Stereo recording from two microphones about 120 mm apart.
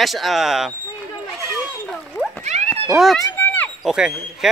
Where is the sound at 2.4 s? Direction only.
70° right (ahead or behind).